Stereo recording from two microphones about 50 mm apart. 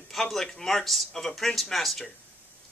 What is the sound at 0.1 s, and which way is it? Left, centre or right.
Speech, centre.